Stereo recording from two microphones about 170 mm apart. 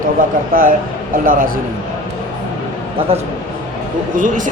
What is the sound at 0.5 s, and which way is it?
Speech, 55° right (ahead or behind).